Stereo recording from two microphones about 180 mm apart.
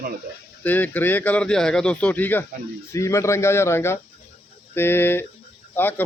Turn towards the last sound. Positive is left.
turn(degrees=10)  # may be behind; listen again after turning